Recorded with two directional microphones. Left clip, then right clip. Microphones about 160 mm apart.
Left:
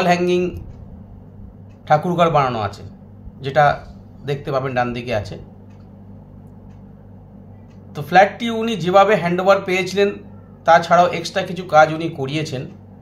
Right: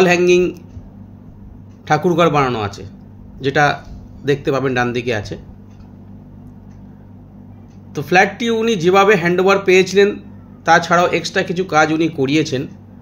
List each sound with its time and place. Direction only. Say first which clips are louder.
0.0 s speech: right 5 dB; 35° right (ahead or behind)
1.9 s speech: right 1 dB; 35° right (ahead or behind)
7.9 s speech: even; 35° right (ahead or behind)